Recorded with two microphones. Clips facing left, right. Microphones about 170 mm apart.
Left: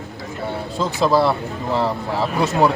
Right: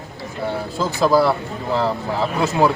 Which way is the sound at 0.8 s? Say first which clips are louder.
Right 1 dB; centre (ahead or behind).